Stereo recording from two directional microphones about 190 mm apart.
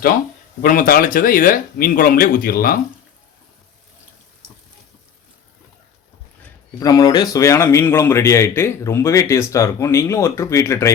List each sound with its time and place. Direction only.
0.6 s speech: 50° left (ahead or behind)
6.4 s speech: 20° left (ahead or behind)